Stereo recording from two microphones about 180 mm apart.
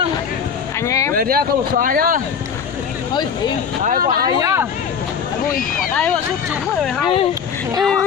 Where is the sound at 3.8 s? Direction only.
50° right (ahead or behind).